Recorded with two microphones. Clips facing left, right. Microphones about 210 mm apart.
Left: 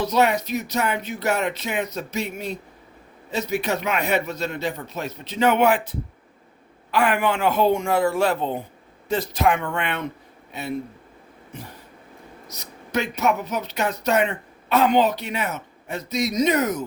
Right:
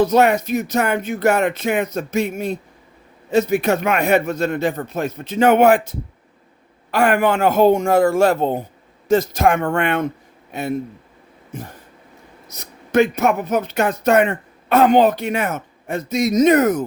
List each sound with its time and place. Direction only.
0.0 s speech: 50° right (ahead or behind)
12.5 s speech: 50° right (ahead or behind)